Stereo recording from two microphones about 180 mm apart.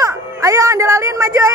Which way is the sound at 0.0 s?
20° right (ahead or behind).